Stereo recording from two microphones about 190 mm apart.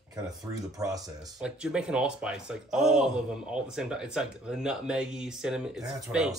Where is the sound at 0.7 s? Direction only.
20° right (ahead or behind).